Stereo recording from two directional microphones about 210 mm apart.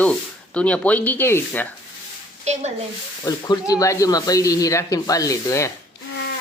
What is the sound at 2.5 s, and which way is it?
Speech, 35° right (ahead or behind).